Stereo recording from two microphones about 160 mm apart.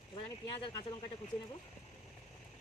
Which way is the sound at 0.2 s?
30° left (ahead or behind).